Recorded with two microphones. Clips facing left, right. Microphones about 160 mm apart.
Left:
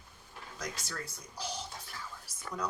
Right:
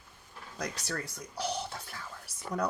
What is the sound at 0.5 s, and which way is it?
Speech, 65° right (ahead or behind).